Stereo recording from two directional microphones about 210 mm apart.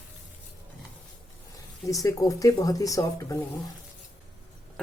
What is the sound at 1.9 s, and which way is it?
Speech, 15° left (ahead or behind).